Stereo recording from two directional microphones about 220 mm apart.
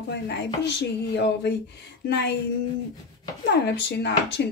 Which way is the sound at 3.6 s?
50° left (ahead or behind).